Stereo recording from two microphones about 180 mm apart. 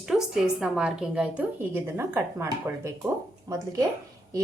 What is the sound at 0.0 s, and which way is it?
A woman's voice, 5° right (ahead or behind).